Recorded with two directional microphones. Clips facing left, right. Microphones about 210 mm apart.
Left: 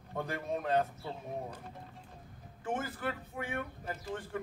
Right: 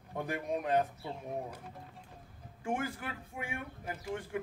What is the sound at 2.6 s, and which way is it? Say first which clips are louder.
Speech: even; 10° right (ahead or behind).